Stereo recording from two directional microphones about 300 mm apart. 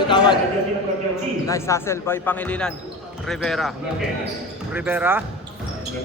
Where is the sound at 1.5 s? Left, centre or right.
Centre.